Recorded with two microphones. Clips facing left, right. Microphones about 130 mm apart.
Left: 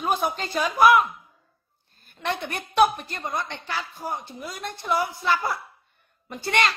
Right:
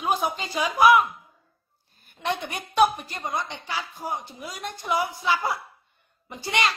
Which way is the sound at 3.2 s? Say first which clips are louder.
Even; 15° right (ahead or behind).